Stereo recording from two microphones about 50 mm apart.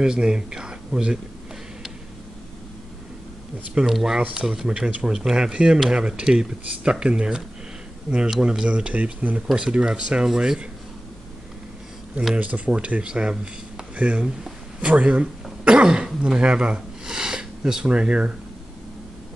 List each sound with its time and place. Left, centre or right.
0.0 s speech: centre
3.9 s speech: centre; by 9.4 s right
9.6 s speech: centre
12.4 s speech: right